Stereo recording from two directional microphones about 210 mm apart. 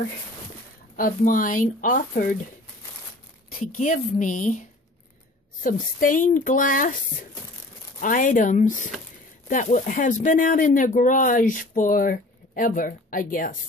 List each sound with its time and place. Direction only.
0.9 s speech: 40° left (ahead or behind)
3.5 s speech: 40° left (ahead or behind)
8.0 s speech: 40° left (ahead or behind)